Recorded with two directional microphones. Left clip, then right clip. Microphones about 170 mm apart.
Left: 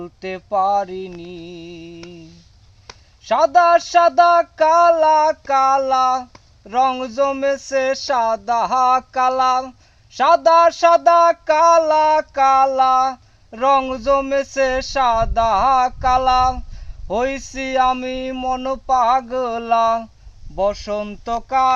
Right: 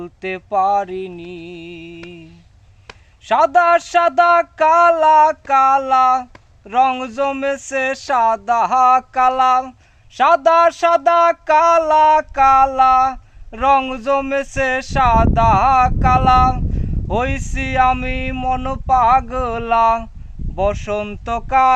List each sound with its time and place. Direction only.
0.0 s music: 25° left (ahead or behind)
3.2 s a sound: 30° left (ahead or behind)
20.6 s music: 20° left (ahead or behind)